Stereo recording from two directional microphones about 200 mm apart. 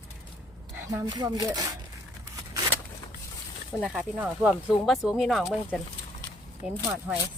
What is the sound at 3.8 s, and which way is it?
Speech, 5° right (ahead or behind).